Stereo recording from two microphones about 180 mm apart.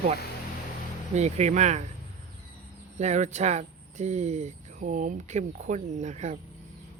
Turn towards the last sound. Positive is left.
turn(degrees=-40)  # may be behind; listen again after turning